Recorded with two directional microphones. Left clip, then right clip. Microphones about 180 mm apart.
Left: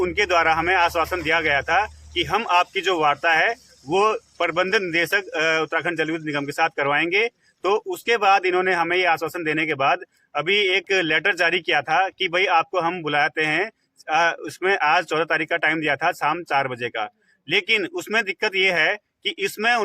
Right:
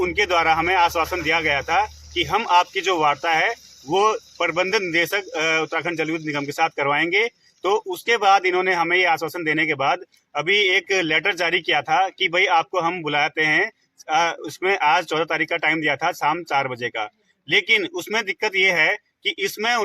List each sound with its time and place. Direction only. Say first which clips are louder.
0.0 s speech: even; 10° left (ahead or behind)